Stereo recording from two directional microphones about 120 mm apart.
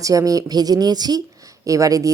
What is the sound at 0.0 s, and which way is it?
Speech, 30° right (ahead or behind).